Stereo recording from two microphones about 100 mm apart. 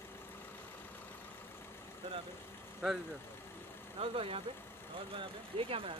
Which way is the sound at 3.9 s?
65° right (ahead or behind).